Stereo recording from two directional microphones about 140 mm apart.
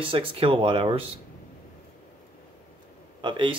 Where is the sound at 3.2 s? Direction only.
35° right (ahead or behind).